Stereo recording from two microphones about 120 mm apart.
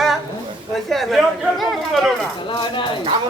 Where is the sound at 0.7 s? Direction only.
Centre (ahead or behind).